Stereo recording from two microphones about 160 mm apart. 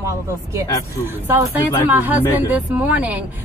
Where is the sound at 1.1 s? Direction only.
15° right (ahead or behind).